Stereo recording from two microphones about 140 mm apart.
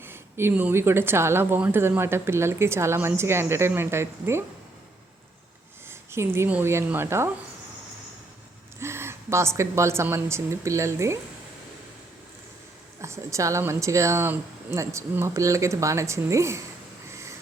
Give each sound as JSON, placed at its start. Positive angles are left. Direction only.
{"t": 0.0, "sound": "a woman's voice", "side_deg": -15}
{"t": 5.9, "sound": "a woman's voice", "side_deg": -20}
{"t": 8.8, "sound": "speech", "side_deg": -20}
{"t": 13.0, "sound": "speech", "side_deg": -20}